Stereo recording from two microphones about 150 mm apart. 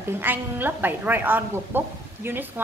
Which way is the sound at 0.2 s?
15° right (ahead or behind).